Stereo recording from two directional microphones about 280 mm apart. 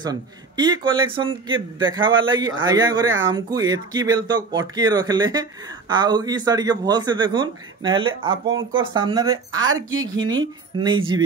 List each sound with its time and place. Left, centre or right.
0.0 s speech: centre
8.5 s speech: right
8.9 s speech: centre